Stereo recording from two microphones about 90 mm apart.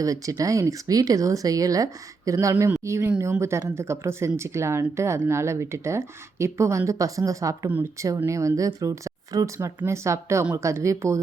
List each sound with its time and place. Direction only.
0.0 s a woman's voice: 40° right (ahead or behind)